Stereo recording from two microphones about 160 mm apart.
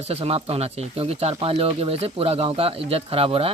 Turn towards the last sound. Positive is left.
turn(degrees=-35)  # may be behind; listen again after turning